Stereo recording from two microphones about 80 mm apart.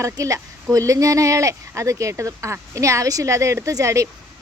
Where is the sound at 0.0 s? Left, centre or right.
Right.